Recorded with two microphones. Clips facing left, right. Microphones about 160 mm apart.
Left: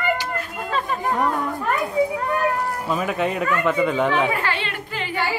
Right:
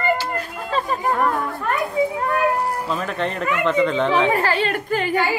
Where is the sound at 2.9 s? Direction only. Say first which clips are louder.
Left 2 dB; 10° left (ahead or behind).